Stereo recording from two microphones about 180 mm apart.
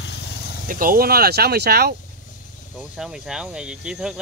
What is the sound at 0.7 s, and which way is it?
Speech, 50° right (ahead or behind).